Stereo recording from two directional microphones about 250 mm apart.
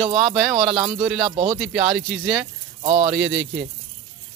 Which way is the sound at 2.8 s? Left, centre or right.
Right.